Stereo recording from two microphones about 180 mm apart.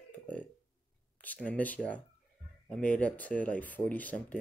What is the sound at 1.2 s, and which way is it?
Speech, 10° left (ahead or behind).